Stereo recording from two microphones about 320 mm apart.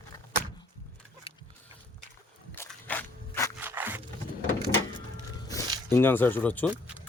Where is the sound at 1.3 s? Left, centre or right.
Centre.